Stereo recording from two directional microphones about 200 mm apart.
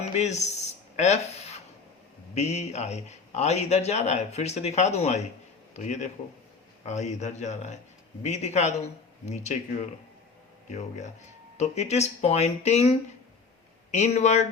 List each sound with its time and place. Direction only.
0.1 s speech: 35° left (ahead or behind)